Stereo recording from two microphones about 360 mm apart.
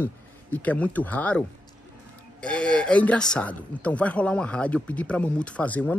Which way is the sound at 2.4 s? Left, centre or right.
Centre.